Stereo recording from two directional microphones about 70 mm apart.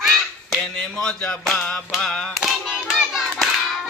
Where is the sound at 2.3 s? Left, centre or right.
Centre.